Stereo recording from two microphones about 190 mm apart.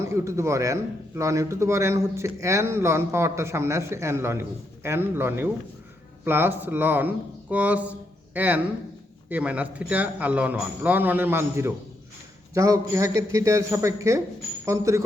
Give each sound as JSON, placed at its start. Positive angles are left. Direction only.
{"t": 0.0, "sound": "a man's voice", "side_deg": -15}